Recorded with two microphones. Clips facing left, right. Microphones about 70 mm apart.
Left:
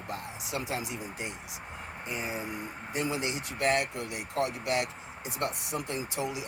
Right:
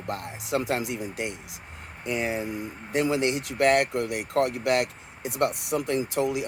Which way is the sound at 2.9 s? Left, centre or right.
Right.